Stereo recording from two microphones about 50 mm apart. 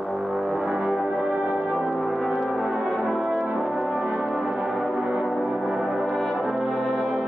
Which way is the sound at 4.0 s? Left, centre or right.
Centre.